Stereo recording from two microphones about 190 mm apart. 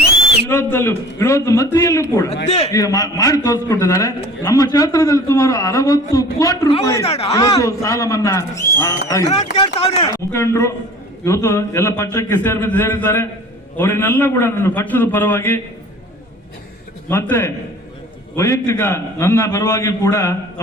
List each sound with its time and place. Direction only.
0.4 s a man's voice: 10° left (ahead or behind)
7.0 s speech: 35° left (ahead or behind)
7.3 s a man's voice: 20° left (ahead or behind)
9.3 s speech: 30° left (ahead or behind)
10.1 s a man's voice: 15° left (ahead or behind)
17.1 s a man's voice: 10° left (ahead or behind)